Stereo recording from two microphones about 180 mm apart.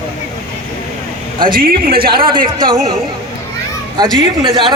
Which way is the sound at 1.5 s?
55° right (ahead or behind).